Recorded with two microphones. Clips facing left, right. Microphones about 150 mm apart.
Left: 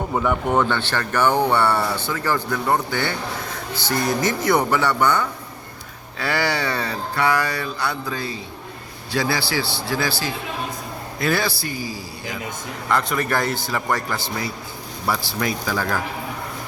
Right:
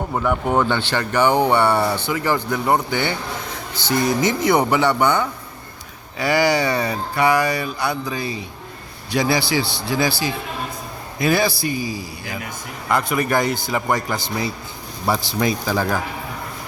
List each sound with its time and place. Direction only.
0.1 s speech: 5° right (ahead or behind); by 16.0 s 25° right (ahead or behind)